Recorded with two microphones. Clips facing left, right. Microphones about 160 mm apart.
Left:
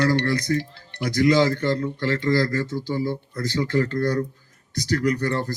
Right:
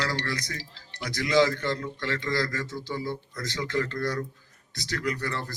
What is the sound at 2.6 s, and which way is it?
Speech, 30° left (ahead or behind).